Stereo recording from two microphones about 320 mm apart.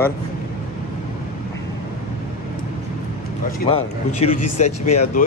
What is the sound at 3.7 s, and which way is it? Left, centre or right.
Speech, centre.